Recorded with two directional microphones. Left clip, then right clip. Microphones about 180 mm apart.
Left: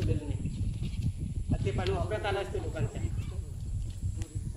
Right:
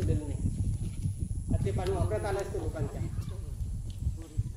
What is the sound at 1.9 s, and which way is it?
Speech, 50° right (ahead or behind).